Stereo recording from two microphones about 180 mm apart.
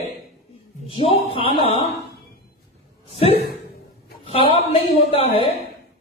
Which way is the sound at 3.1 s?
35° left (ahead or behind).